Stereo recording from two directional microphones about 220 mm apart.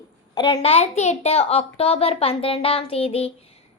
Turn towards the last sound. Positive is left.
turn(degrees=25)  # may be behind; listen again after turning